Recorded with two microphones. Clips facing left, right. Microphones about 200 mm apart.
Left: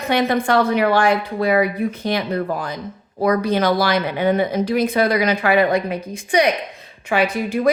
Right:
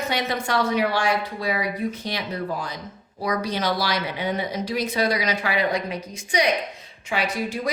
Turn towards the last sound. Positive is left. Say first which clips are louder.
# left 6 dB
turn(degrees=55)  # may be behind; listen again after turning